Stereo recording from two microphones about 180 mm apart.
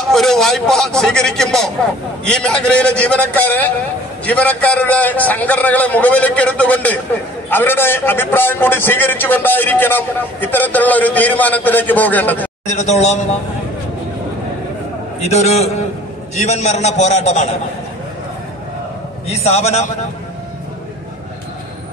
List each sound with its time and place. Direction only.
0.0 s a man's voice: centre (ahead or behind)
12.6 s a man's voice: 40° left (ahead or behind)
15.1 s a man's voice: 35° left (ahead or behind)
19.2 s a man's voice: 35° left (ahead or behind)